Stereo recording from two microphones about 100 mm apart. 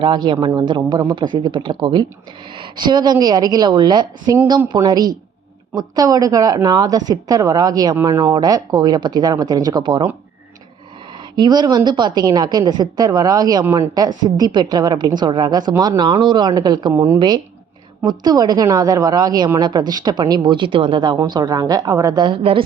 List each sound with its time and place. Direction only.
0.0 s a woman's voice: 50° right (ahead or behind)
11.3 s a woman's voice: 45° right (ahead or behind)
16.9 s a woman's voice: 30° right (ahead or behind)
17.2 s a woman's voice: 45° right (ahead or behind)
21.0 s a woman's voice: 45° right (ahead or behind)
22.5 s a woman's voice: 75° right (ahead or behind)